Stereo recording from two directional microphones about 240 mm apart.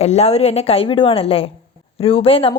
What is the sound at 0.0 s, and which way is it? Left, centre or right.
A woman's voice, left.